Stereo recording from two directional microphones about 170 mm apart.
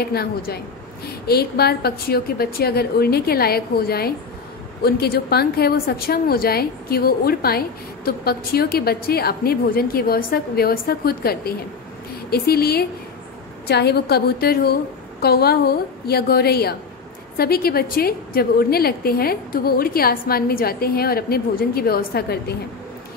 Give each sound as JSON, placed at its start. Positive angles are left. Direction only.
{"t": 0.0, "sound": "a woman's voice", "side_deg": 65}